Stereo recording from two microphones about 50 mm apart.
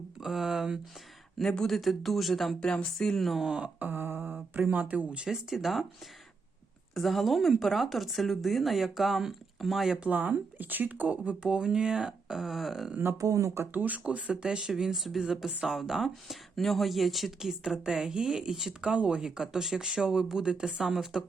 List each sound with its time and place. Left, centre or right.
0.2 s speech: centre
1.4 s speech: centre
2.6 s speech: centre
3.2 s speech: centre
3.4 s speech: centre
3.8 s speech: right; by 5.8 s centre
6.9 s speech: centre
10.1 s speech: right; by 12.9 s centre
13.3 s speech: right
13.7 s speech: right; by 18.7 s centre
18.8 s speech: centre